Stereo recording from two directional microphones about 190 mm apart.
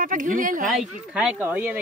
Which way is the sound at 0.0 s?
45° right (ahead or behind).